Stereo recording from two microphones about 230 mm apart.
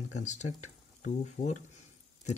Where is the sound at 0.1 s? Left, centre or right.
Left.